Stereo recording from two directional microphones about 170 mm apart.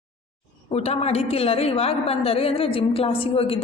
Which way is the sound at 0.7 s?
35° left (ahead or behind).